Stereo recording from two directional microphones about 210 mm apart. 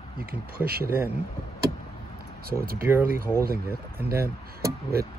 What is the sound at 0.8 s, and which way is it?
Speech, 10° right (ahead or behind).